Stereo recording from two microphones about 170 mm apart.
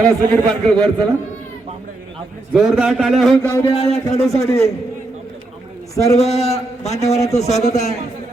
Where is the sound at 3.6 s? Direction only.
35° left (ahead or behind).